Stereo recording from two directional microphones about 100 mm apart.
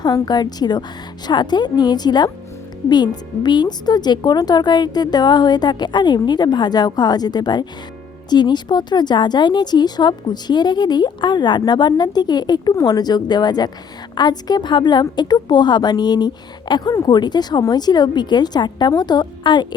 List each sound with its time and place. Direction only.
0.0 s a woman's voice: 45° left (ahead or behind)